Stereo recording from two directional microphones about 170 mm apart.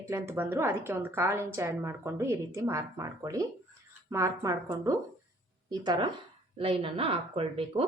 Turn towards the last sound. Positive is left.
turn(degrees=-35)  # may be behind; listen again after turning